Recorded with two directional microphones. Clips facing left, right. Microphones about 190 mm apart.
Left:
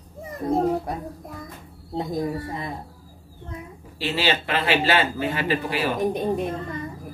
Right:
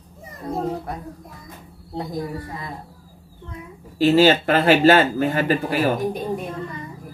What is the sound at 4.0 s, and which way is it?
Speech, 45° right (ahead or behind).